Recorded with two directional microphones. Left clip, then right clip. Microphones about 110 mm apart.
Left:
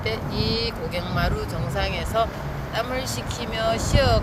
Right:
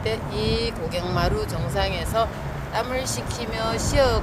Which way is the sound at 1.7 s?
65° right (ahead or behind).